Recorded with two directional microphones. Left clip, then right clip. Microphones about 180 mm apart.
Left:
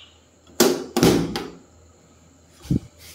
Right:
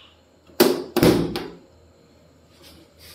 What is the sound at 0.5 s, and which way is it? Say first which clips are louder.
Tap: right 1 dB; 10° right (ahead or behind).